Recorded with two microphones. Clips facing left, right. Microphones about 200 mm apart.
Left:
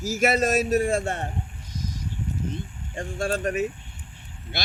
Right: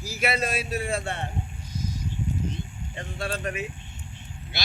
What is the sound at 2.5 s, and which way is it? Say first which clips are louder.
Speech: left 3 dB; 45° left (ahead or behind).